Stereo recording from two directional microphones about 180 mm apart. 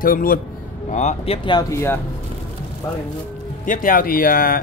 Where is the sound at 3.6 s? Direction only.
45° left (ahead or behind).